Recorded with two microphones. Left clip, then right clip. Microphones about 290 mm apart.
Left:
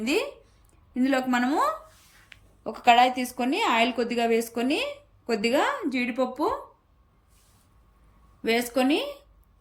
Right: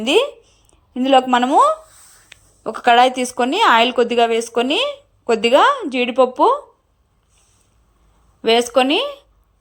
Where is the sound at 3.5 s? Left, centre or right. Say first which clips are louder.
Right 10 dB; centre.